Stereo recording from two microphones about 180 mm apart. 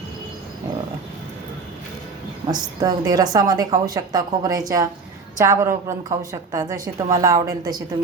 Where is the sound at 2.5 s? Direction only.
20° right (ahead or behind).